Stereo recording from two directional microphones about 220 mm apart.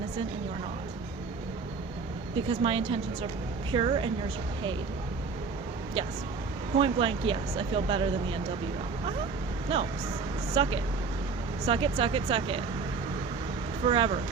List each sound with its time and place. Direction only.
2.5 s speech: 25° right (ahead or behind)
6.7 s speech: 25° right (ahead or behind)
10.5 s speech: 25° right (ahead or behind)
13.8 s speech: 25° right (ahead or behind)